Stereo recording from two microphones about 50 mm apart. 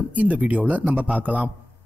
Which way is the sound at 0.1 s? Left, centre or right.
Right.